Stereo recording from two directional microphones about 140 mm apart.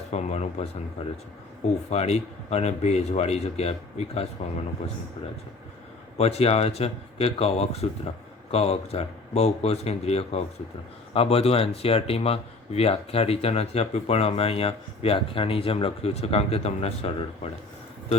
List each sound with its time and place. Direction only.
0.1 s speech: 55° left (ahead or behind)
6.1 s speech: 50° left (ahead or behind)